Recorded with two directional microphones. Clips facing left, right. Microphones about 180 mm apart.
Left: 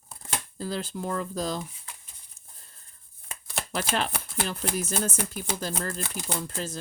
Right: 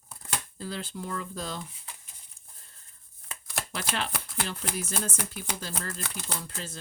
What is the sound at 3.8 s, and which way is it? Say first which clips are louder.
Speech: left 5 dB; 45° left (ahead or behind).